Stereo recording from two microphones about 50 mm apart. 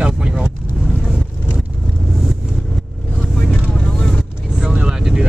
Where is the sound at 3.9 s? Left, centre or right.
Centre.